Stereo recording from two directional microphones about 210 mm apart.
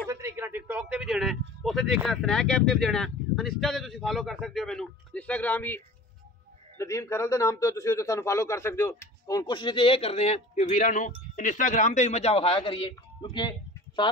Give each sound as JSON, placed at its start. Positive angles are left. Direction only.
{"t": 0.1, "sound": "a man's voice", "side_deg": -10}
{"t": 6.8, "sound": "a man's voice", "side_deg": 15}